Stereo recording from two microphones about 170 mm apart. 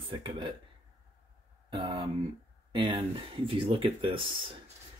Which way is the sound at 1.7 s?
25° right (ahead or behind).